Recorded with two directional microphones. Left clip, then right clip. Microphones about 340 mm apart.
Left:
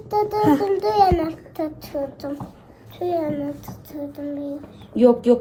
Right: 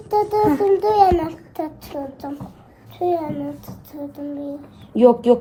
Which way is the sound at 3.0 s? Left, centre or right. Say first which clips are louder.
Right 2 dB; centre.